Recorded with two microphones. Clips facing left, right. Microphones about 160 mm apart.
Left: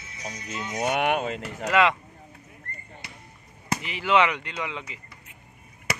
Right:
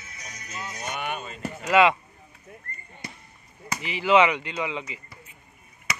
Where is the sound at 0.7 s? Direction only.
85° left.